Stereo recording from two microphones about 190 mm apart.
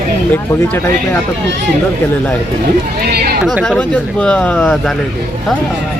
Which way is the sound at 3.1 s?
55° right (ahead or behind).